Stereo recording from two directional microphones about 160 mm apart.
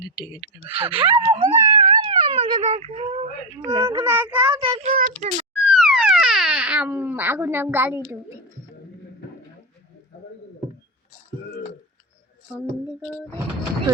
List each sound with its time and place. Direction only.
0.8 s speech: 30° right (ahead or behind)
3.6 s a child's voice: 20° right (ahead or behind)
4.8 s speech: 55° right (ahead or behind)
5.5 s speech: 5° right (ahead or behind)